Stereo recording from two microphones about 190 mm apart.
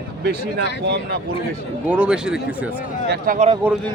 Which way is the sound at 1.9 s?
5° right (ahead or behind).